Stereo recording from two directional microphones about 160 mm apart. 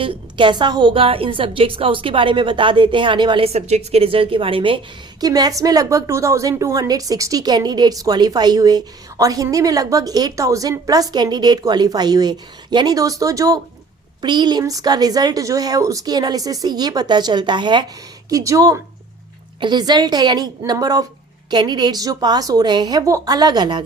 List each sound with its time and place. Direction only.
0.0 s a woman's voice: 30° right (ahead or behind)
5.2 s a woman's voice: 25° right (ahead or behind)